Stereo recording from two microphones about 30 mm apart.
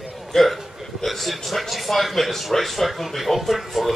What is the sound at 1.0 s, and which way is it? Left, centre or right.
Speech, centre.